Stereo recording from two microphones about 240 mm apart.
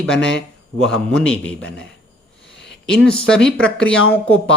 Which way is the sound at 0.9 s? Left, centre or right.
Centre.